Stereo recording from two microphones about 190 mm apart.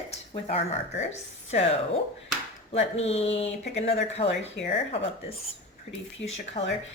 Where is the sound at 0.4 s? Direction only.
35° left (ahead or behind).